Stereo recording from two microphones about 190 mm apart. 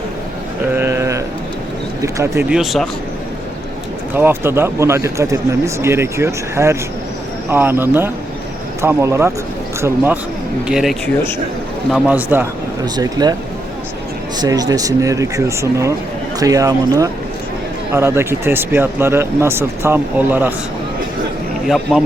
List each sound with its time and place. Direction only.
0.7 s sheep: 10° right (ahead or behind)
2.0 s speech: 15° right (ahead or behind)
4.1 s a man's voice: 10° right (ahead or behind)
12.8 s speech: 20° right (ahead or behind)
14.3 s speech: 20° right (ahead or behind)
21.7 s a man's voice: centre (ahead or behind)